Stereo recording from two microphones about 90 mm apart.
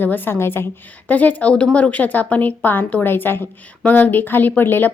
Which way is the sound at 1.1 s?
15° left (ahead or behind).